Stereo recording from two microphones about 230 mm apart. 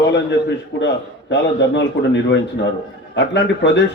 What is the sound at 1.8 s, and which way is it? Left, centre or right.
A man's voice, left.